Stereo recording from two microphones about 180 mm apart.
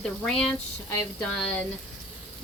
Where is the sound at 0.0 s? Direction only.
5° left (ahead or behind).